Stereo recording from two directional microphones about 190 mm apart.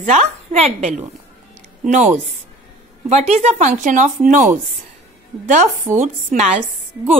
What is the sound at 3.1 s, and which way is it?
A woman's voice, 35° right (ahead or behind).